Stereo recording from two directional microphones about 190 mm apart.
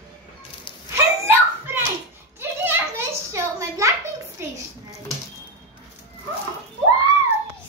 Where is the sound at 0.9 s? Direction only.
10° right (ahead or behind).